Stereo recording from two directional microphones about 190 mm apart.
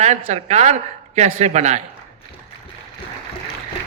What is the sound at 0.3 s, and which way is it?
A man's voice, 35° right (ahead or behind).